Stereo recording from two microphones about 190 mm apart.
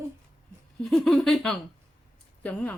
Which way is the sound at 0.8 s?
Centre (ahead or behind).